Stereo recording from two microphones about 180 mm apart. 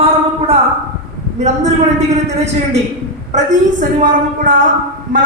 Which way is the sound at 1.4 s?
40° right (ahead or behind).